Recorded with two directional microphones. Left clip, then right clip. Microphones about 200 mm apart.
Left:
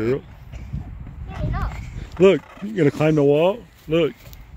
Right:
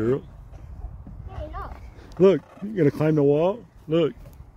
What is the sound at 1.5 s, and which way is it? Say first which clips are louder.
Clip-clop: left 5 dB; centre (ahead or behind).